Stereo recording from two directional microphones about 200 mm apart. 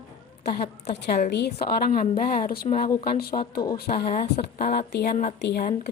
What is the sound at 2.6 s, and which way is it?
Speech, 30° left (ahead or behind).